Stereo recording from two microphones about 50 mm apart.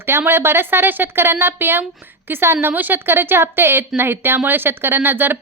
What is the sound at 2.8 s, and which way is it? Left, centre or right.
Speech, right.